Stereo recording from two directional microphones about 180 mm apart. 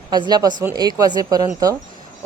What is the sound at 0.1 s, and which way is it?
A woman's voice, 25° right (ahead or behind).